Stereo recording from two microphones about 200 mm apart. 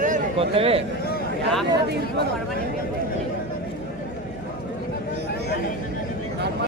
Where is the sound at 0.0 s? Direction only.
35° right (ahead or behind).